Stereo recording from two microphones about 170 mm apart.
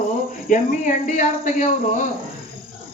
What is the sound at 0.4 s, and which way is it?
Speech, 50° left (ahead or behind).